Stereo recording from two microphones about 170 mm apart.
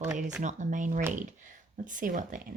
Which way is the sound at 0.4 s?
50° right (ahead or behind).